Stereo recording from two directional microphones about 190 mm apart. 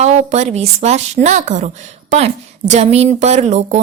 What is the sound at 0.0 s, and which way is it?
A woman's voice, 35° right (ahead or behind).